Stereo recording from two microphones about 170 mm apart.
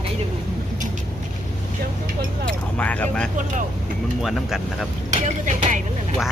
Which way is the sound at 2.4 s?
10° left (ahead or behind).